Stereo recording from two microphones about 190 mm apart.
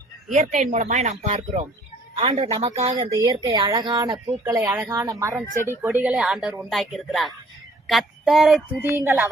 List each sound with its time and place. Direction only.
0.3 s speech: 40° right (ahead or behind)
2.2 s a woman's voice: 20° right (ahead or behind)
3.2 s a woman's voice: 20° right (ahead or behind); by 8.9 s centre (ahead or behind)
8.9 s a woman's voice: 15° right (ahead or behind)